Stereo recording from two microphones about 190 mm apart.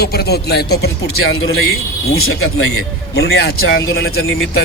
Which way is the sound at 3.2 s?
60° left (ahead or behind).